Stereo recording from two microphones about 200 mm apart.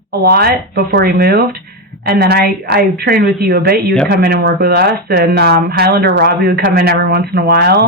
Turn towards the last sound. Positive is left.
turn(degrees=-55)  # may be behind; listen again after turning